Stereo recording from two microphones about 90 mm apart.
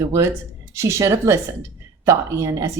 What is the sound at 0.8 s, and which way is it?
A woman's voice, 35° right (ahead or behind).